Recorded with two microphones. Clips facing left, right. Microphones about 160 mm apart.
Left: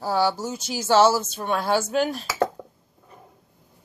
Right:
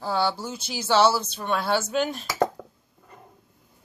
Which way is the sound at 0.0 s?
10° left (ahead or behind).